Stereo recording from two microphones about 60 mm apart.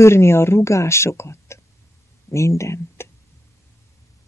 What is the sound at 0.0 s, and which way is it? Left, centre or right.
Speech, left.